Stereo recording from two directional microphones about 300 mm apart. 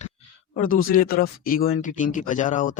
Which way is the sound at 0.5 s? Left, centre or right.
Left.